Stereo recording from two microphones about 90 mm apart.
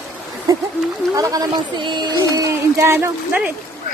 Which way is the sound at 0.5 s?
40° right (ahead or behind).